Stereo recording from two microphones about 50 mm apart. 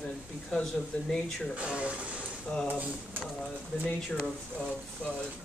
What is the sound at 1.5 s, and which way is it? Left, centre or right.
Speech, right.